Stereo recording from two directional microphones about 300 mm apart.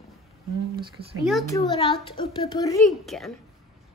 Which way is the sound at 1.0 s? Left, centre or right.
Right.